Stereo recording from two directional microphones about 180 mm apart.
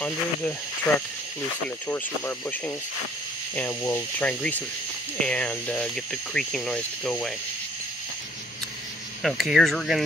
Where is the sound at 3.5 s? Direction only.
10° left (ahead or behind).